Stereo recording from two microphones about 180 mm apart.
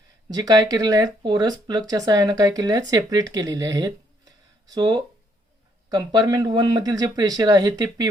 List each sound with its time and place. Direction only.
0.3 s speech: 20° right (ahead or behind)